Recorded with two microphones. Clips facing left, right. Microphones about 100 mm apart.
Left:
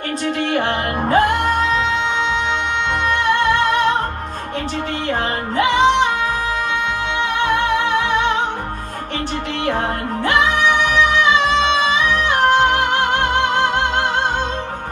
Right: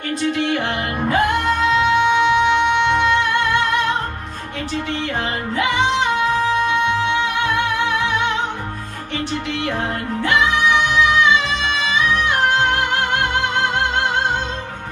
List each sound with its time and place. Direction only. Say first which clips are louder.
0.2 s music: left 1 dB; 35° left (ahead or behind)
5.6 s music: left 4 dB; 30° left (ahead or behind)
7.4 s music: left 2 dB; 30° left (ahead or behind)
11.3 s music: left 5 dB; 30° left (ahead or behind)